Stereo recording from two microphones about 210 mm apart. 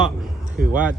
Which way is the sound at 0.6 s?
40° right (ahead or behind).